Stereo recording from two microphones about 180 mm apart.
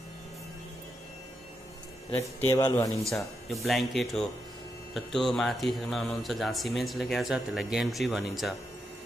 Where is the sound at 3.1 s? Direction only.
Centre (ahead or behind).